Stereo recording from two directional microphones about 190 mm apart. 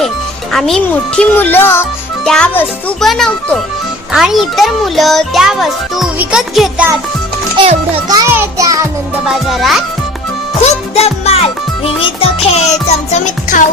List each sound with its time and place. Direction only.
0.5 s a child's voice: 5° left (ahead or behind)
7.6 s a child's voice: 20° right (ahead or behind)
9.2 s a child's voice: centre (ahead or behind)
10.6 s music: 35° left (ahead or behind)